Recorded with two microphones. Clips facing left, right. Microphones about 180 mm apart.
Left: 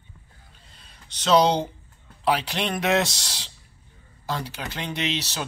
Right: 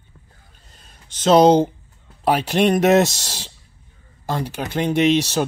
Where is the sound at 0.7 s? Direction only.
45° right (ahead or behind).